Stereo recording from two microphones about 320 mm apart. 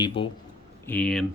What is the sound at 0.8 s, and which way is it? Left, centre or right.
Speech, centre.